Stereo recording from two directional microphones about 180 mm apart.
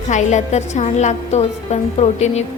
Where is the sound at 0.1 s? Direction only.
40° left (ahead or behind).